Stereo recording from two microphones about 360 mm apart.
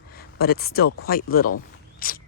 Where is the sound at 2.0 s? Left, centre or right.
Left.